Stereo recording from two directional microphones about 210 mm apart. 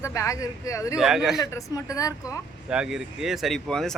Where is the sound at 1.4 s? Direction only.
15° left (ahead or behind).